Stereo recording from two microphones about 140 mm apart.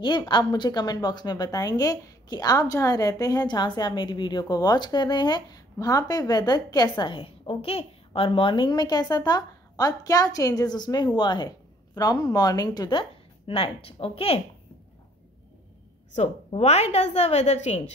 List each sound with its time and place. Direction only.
0.0 s a woman's voice: 35° left (ahead or behind)
13.5 s a woman's voice: 40° left (ahead or behind)
16.2 s a woman's voice: 50° left (ahead or behind)